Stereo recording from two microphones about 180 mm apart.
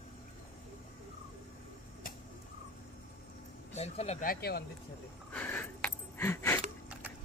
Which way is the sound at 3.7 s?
35° left (ahead or behind).